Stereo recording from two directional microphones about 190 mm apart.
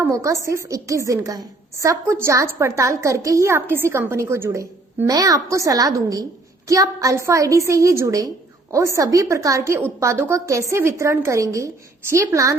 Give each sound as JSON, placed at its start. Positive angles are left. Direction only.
{"t": 0.0, "sound": "a woman's voice", "side_deg": -15}